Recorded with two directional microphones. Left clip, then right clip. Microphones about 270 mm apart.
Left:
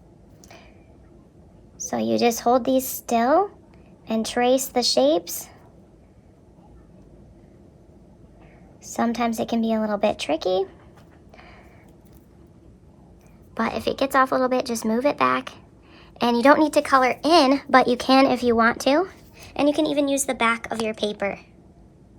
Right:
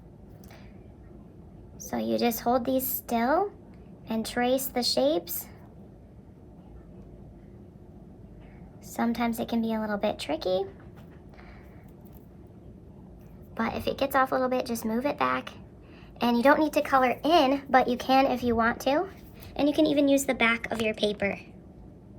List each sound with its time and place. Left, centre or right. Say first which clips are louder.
1.8 s a woman's voice: left 6 dB; left
8.8 s a woman's voice: left 6 dB; left
13.5 s a woman's voice: left 5 dB; left; by 21.3 s centre